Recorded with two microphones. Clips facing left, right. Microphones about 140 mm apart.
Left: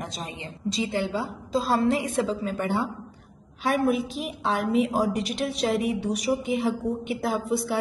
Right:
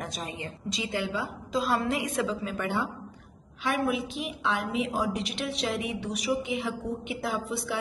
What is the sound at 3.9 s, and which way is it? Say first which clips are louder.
A woman's voice: left 4 dB; 40° left (ahead or behind).